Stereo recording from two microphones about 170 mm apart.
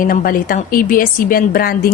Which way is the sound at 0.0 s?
55° left (ahead or behind).